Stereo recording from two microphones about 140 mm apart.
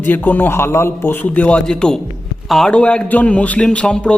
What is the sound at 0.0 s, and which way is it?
A man's voice, 15° left (ahead or behind).